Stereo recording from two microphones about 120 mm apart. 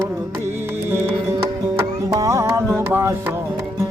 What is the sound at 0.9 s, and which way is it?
Music, 20° right (ahead or behind).